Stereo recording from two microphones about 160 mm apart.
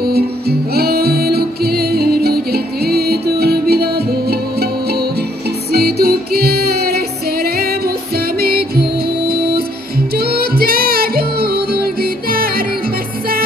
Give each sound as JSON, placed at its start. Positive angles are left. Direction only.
{"t": 0.1, "sound": "music", "side_deg": -80}